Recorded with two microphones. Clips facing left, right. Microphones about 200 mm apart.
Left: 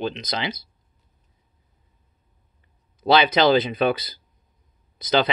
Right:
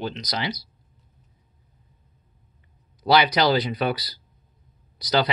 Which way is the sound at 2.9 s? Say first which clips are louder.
Left 2 dB; 25° left (ahead or behind).